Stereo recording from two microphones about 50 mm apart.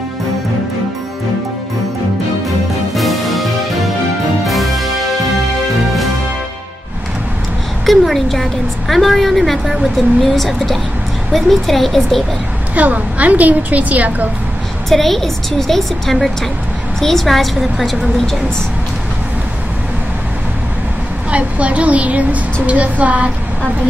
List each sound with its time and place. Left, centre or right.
3.0 s music: centre
7.8 s a woman's voice: centre
12.7 s a woman's voice: right
14.9 s a woman's voice: centre
21.3 s speech: right